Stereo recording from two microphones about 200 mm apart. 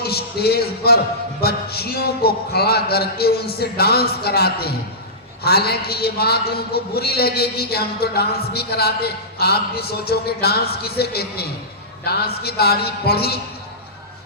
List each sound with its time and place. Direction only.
0.0 s a man's voice: 50° left (ahead or behind)